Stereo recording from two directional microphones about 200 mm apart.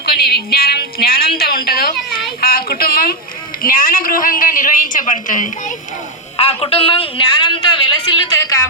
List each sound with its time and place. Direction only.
0.0 s speech: 55° left (ahead or behind)
1.4 s a sound: 50° left (ahead or behind)
3.6 s a woman's voice: 45° left (ahead or behind)
6.3 s a man's voice: 30° left (ahead or behind)